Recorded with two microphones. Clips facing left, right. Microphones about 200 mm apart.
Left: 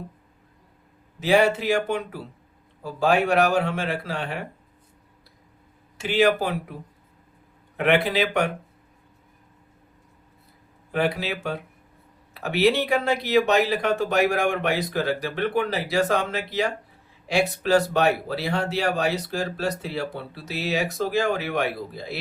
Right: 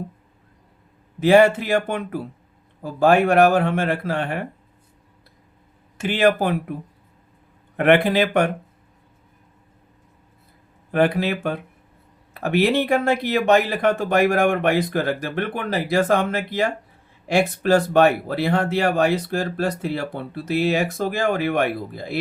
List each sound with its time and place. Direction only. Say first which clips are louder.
1.2 s speech: right 5 dB; 50° right (ahead or behind)
6.0 s speech: right 2 dB; 55° right (ahead or behind)
7.8 s speech: right 5 dB; 50° right (ahead or behind)
10.9 s speech: right 5 dB; 50° right (ahead or behind)